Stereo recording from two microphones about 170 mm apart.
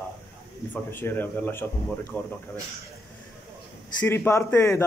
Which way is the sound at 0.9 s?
10° left (ahead or behind).